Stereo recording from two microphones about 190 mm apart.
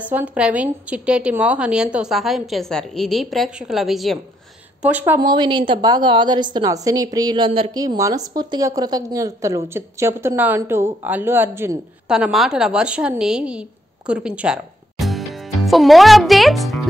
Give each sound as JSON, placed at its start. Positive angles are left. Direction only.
{"t": 0.1, "sound": "a woman's voice", "side_deg": -10}
{"t": 5.3, "sound": "a woman's voice", "side_deg": -25}
{"t": 12.1, "sound": "a woman's voice", "side_deg": 0}